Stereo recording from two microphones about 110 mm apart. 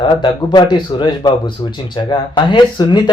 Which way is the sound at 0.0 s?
45° left (ahead or behind).